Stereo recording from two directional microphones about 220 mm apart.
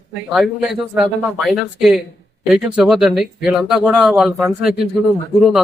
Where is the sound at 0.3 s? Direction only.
Centre (ahead or behind).